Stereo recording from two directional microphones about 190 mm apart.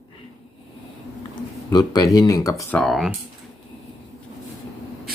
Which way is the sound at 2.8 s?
Centre (ahead or behind).